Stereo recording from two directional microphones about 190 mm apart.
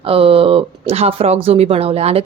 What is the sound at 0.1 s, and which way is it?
Speech, 30° right (ahead or behind).